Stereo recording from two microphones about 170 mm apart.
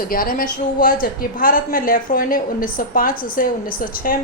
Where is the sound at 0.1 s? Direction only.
60° left (ahead or behind).